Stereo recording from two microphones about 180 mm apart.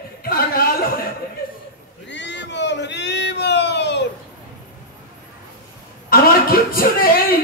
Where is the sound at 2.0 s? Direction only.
75° left (ahead or behind).